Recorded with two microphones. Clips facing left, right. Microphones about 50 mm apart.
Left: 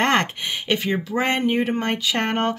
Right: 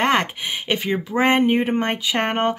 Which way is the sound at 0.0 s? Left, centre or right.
Centre.